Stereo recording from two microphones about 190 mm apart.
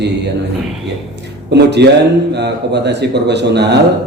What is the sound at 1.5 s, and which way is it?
A man's voice, 65° right (ahead or behind).